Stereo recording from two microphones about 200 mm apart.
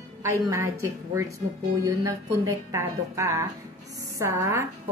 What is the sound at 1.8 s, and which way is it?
A woman's voice, 15° right (ahead or behind).